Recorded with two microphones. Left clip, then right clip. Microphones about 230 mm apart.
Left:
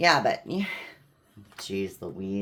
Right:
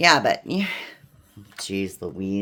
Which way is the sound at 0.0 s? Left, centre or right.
Right.